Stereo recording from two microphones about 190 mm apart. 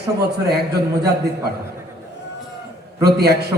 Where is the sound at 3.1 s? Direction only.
55° right (ahead or behind).